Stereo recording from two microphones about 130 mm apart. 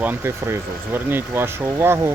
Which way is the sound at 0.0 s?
15° right (ahead or behind).